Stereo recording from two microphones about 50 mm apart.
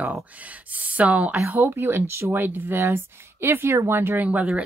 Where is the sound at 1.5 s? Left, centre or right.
Right.